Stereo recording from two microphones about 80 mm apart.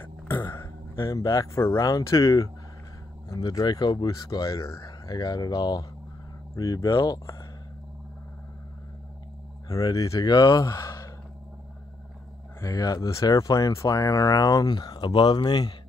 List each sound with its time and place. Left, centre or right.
0.0 s speech: left
3.6 s speech: left
4.8 s speech: left
9.7 s speech: left
10.3 s speech: left
10.6 s sigh: left
12.5 s speech: left